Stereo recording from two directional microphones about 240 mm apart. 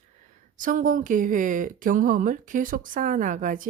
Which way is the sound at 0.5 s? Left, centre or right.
Right.